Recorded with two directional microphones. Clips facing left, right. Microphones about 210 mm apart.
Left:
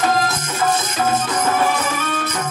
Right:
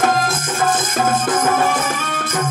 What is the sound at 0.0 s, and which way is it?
Music, 50° right (ahead or behind).